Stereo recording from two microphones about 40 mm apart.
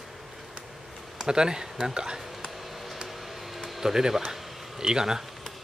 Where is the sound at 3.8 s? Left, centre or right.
Centre.